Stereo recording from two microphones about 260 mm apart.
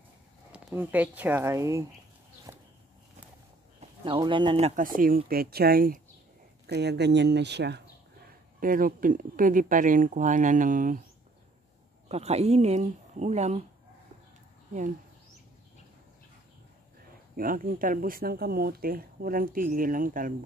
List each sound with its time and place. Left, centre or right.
0.5 s speech: centre
4.0 s speech: centre
12.1 s speech: right
17.4 s speech: right